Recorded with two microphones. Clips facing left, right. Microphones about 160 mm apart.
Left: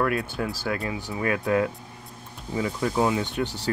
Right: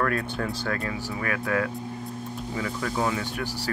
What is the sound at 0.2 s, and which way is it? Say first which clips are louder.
Speech: even; 5° left (ahead or behind).